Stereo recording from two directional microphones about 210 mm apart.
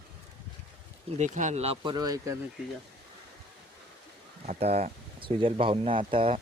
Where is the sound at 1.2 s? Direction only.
35° right (ahead or behind); by 2.4 s 15° right (ahead or behind).